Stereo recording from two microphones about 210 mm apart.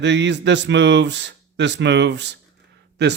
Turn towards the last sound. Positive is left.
turn(degrees=-55)  # may be behind; listen again after turning